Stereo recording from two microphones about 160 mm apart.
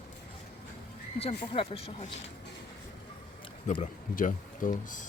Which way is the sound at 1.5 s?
40° left (ahead or behind).